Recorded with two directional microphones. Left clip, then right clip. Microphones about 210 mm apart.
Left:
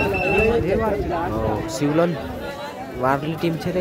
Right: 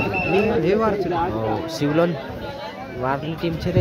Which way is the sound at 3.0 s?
10° left (ahead or behind).